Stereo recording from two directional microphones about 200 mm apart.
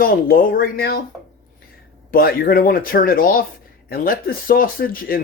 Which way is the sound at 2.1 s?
50° left (ahead or behind).